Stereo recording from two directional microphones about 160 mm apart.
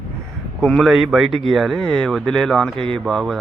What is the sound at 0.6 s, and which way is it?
Speech, centre (ahead or behind).